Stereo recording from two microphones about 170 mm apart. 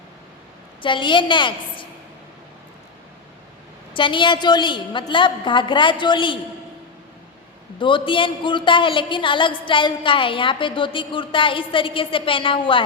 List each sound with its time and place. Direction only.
0.8 s a woman's voice: 30° left (ahead or behind)
3.9 s a woman's voice: 30° left (ahead or behind)
7.8 s a woman's voice: 30° left (ahead or behind)